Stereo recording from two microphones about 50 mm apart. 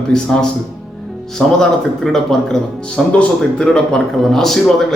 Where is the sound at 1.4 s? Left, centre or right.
Centre.